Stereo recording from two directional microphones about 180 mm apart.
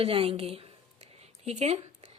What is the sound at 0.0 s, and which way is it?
Speech, 30° right (ahead or behind).